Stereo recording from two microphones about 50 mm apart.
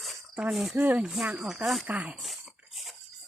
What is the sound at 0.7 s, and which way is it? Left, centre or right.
Speech, right.